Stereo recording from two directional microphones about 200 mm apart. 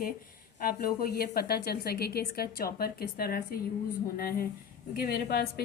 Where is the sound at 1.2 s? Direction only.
50° left (ahead or behind).